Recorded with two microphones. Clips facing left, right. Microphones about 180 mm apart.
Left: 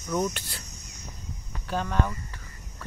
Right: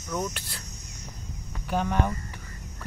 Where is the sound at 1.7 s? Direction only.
15° right (ahead or behind).